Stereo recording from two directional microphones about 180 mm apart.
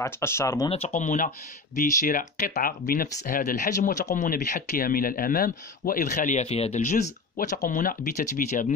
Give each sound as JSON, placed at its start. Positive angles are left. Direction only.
{"t": 0.0, "sound": "speech", "side_deg": 15}
{"t": 0.7, "sound": "speech", "side_deg": 35}